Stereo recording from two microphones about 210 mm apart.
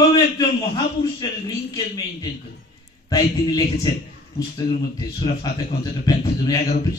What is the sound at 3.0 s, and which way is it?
A man's voice, 20° left (ahead or behind).